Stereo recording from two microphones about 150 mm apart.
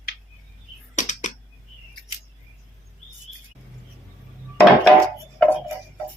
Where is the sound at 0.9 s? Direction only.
55° left (ahead or behind).